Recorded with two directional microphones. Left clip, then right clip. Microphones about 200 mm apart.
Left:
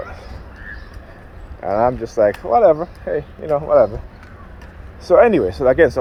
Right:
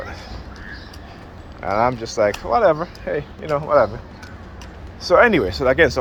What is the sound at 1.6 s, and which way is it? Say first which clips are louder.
Speech: left 2 dB; 40° left (ahead or behind).